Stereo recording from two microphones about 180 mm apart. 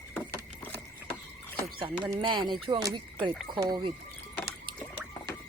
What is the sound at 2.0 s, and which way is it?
Speech, 25° right (ahead or behind).